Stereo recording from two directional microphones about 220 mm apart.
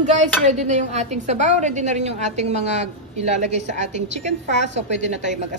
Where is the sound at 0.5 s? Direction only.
30° right (ahead or behind).